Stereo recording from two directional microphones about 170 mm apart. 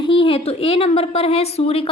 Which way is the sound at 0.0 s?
30° left (ahead or behind).